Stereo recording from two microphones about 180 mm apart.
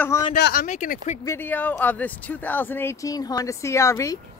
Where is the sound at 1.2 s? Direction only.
10° left (ahead or behind).